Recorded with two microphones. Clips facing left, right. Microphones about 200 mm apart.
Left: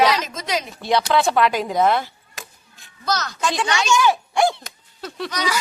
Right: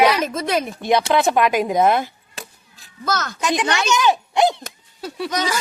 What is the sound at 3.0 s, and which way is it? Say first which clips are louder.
Speech: right 1 dB; 50° right (ahead or behind).